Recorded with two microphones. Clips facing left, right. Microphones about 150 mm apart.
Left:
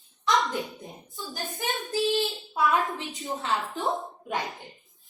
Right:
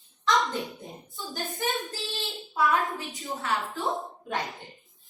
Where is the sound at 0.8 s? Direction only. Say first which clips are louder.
Even; centre (ahead or behind).